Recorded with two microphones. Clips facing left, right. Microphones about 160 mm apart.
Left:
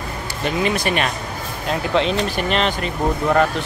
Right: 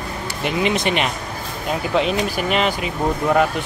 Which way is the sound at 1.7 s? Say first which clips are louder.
Even; 5° right (ahead or behind).